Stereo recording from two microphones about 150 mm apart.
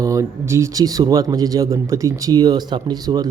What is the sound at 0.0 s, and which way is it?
Speech, 20° right (ahead or behind).